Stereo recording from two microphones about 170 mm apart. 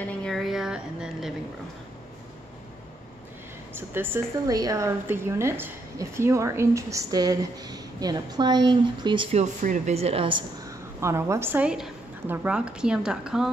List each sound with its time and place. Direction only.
0.2 s a sound: centre (ahead or behind)
3.7 s a woman's voice: 15° right (ahead or behind); by 10.4 s 30° right (ahead or behind)
11.0 s a woman's voice: 15° right (ahead or behind)